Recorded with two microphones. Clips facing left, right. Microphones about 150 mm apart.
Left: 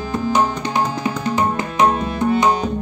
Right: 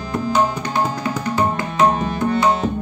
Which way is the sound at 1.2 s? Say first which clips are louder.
Even; 20° left (ahead or behind).